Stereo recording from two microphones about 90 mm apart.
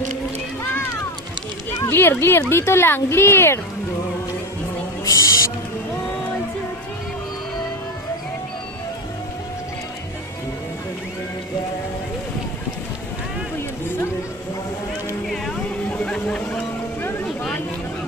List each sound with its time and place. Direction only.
1.9 s speech: 25° left (ahead or behind)
5.0 s owl: 40° left (ahead or behind)
15.2 s vehicle: 5° left (ahead or behind)